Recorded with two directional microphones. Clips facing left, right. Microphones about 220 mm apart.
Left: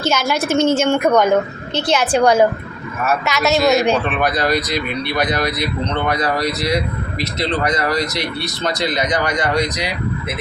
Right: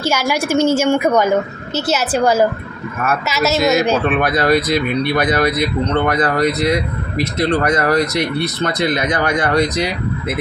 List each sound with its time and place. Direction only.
0.0 s a woman's voice: 10° right (ahead or behind)
4.1 s speech: 50° right (ahead or behind)